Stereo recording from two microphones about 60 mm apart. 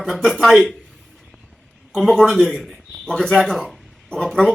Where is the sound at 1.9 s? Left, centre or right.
Centre.